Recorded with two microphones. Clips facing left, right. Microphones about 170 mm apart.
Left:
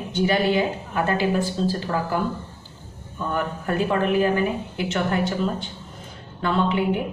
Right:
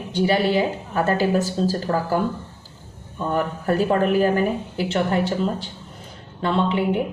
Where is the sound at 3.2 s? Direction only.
30° right (ahead or behind).